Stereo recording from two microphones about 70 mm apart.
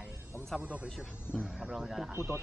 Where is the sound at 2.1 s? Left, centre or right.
Right.